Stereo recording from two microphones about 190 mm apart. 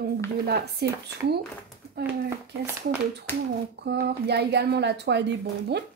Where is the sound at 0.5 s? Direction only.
60° right (ahead or behind).